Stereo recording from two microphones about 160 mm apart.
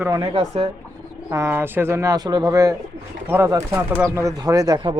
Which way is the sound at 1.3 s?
15° right (ahead or behind).